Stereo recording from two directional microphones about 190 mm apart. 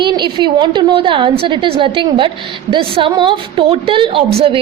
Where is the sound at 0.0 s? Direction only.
25° right (ahead or behind).